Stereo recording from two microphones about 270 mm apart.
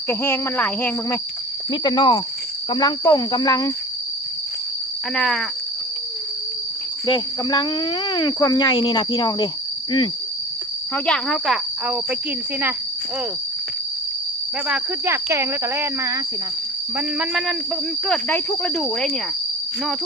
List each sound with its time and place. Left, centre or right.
0.1 s speech: centre
5.1 s speech: centre
7.0 s speech: centre
10.9 s speech: centre
14.7 s speech: centre